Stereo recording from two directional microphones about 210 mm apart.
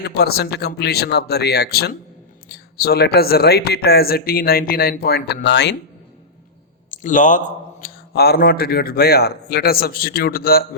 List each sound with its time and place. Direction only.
0.0 s a man's voice: 50° left (ahead or behind)
6.9 s a man's voice: 35° left (ahead or behind)